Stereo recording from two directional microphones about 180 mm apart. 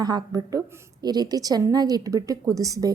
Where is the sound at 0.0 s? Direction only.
20° right (ahead or behind).